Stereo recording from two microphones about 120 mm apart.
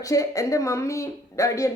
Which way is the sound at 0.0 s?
30° left (ahead or behind).